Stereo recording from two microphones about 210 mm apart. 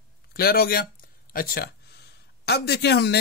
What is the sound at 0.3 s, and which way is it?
A man's voice, 50° left (ahead or behind).